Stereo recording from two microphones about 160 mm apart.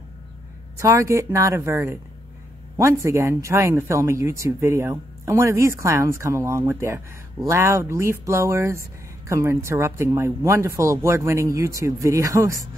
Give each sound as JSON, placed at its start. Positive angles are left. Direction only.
{"t": 0.7, "sound": "speech", "side_deg": -20}